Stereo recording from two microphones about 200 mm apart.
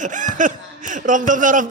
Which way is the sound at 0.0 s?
40° right (ahead or behind).